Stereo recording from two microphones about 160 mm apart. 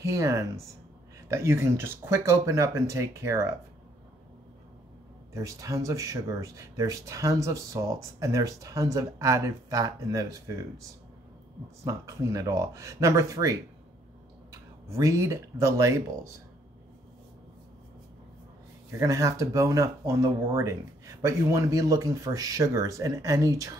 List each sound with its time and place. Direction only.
0.0 s speech: 20° right (ahead or behind)
5.3 s speech: 20° right (ahead or behind)
11.8 s speech: 20° right (ahead or behind)
14.9 s speech: 20° right (ahead or behind)
18.9 s speech: 20° right (ahead or behind)